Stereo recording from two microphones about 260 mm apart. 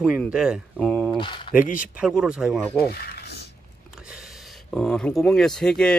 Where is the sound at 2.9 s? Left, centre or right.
Left.